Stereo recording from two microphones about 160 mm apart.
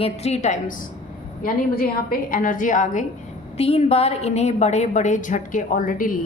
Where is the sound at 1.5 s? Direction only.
65° left (ahead or behind).